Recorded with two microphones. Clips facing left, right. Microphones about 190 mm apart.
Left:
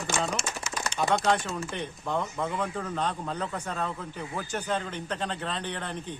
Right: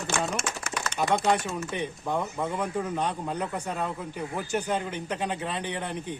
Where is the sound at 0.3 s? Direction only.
60° right (ahead or behind).